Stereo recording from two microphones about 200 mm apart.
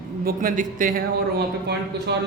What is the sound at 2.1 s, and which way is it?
Speech, 60° right (ahead or behind).